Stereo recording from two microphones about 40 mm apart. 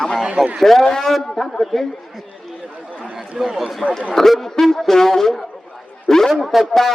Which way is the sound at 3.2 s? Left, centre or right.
Centre.